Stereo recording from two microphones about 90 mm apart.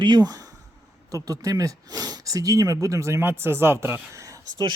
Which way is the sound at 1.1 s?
40° right (ahead or behind).